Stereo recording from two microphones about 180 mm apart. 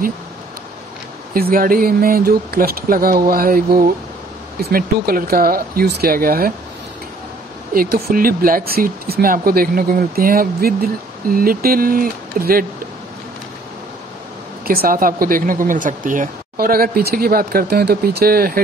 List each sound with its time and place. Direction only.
1.3 s speech: 55° right (ahead or behind)
7.7 s speech: 55° right (ahead or behind)
14.7 s speech: 55° right (ahead or behind)